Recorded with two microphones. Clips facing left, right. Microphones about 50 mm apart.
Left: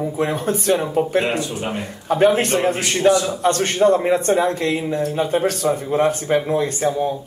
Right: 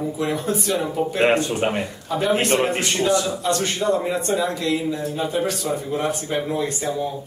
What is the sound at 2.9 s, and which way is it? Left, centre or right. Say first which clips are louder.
A man's voice: left 4 dB; left.